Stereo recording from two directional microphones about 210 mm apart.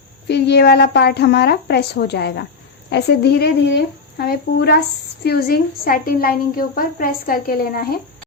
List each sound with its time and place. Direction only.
0.3 s a woman's voice: 55° left (ahead or behind)